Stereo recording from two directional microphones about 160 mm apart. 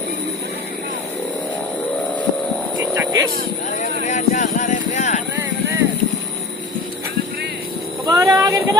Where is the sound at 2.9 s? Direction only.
20° right (ahead or behind).